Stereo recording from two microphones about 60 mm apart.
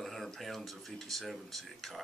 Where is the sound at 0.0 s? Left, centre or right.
Centre.